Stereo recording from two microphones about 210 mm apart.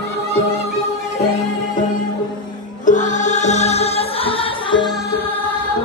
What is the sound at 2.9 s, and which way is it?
Music, 35° left (ahead or behind).